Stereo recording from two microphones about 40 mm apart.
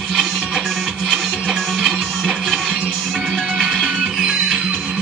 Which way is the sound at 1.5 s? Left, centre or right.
Centre.